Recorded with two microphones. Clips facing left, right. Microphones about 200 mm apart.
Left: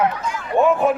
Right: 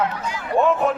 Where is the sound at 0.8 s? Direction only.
10° left (ahead or behind).